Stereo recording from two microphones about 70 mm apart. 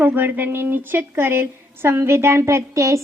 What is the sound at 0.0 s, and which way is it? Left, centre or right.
A woman's voice, right.